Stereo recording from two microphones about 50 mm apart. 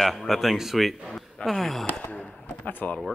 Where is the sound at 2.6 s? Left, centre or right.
Left.